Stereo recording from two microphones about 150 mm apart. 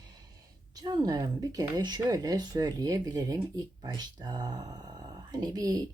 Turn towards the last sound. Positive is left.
turn(degrees=-25)  # may be behind; listen again after turning